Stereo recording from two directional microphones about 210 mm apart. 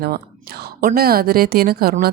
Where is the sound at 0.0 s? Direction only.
50° right (ahead or behind).